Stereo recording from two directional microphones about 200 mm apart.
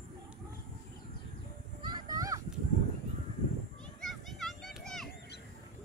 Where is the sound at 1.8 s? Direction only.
20° right (ahead or behind).